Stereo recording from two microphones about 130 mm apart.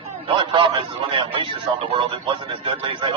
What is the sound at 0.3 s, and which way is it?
A man's voice, 40° right (ahead or behind).